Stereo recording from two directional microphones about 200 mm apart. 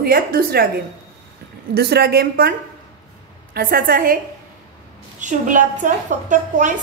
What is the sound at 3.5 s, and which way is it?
Speech, 50° right (ahead or behind).